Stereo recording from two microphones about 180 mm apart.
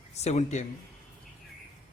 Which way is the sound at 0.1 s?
35° left (ahead or behind).